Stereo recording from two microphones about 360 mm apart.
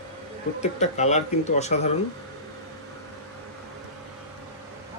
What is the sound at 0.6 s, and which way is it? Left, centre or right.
Speech, centre.